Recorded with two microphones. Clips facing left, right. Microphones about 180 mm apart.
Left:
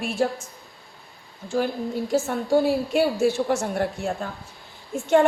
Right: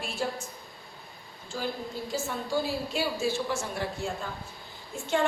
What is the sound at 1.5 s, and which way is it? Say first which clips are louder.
A woman's voice: left 9 dB; 65° left (ahead or behind).